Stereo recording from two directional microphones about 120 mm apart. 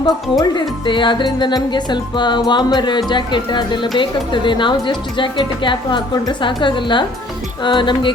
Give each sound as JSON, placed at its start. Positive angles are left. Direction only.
{"t": 0.0, "sound": "speech", "side_deg": 35}